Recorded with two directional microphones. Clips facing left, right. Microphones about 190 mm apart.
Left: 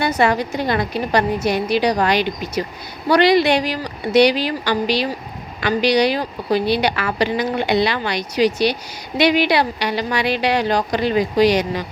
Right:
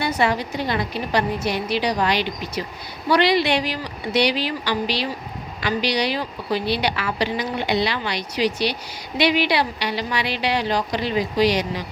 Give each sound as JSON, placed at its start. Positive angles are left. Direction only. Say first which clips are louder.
{"t": 0.0, "sound": "a woman's voice", "louder": "left 4 dB", "side_deg": 50}